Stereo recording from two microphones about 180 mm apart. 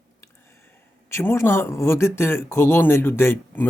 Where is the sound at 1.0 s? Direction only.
15° left (ahead or behind).